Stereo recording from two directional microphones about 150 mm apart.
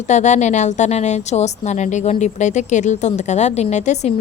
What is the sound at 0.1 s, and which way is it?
A woman's voice, 50° left (ahead or behind).